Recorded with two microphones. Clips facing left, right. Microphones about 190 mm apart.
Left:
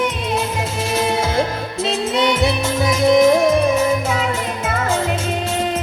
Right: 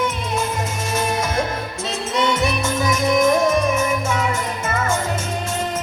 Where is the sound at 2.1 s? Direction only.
30° left (ahead or behind).